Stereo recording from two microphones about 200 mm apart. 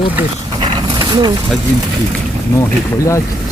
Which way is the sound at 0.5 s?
25° right (ahead or behind).